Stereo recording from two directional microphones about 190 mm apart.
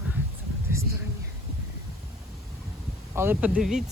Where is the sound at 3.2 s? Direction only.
10° right (ahead or behind).